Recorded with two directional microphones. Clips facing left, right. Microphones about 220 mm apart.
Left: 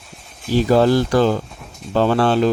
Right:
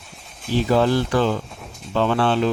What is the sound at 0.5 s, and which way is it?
Speech, 40° left (ahead or behind).